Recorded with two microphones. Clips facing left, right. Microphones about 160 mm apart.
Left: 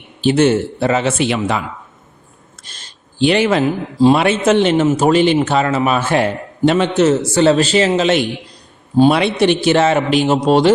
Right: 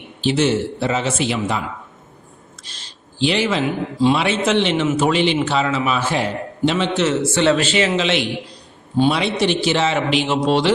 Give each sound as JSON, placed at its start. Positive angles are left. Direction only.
{"t": 0.2, "sound": "a man's voice", "side_deg": 50}
{"t": 2.6, "sound": "a sound", "side_deg": 50}
{"t": 4.1, "sound": "a man's voice", "side_deg": 50}